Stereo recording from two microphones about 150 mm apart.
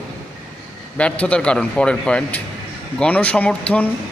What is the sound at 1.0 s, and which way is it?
A man's voice, 10° left (ahead or behind).